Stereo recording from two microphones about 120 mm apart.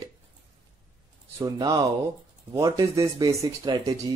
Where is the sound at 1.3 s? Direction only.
30° right (ahead or behind).